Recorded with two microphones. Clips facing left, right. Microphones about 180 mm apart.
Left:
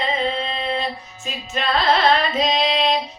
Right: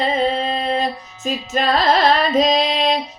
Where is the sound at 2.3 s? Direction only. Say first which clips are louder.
Right 4 dB; 40° right (ahead or behind).